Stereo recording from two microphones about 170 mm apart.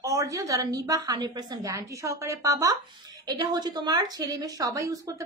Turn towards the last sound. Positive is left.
turn(degrees=-20)  # may be behind; listen again after turning